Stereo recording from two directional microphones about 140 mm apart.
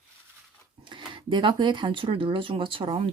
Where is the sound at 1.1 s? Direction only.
35° right (ahead or behind).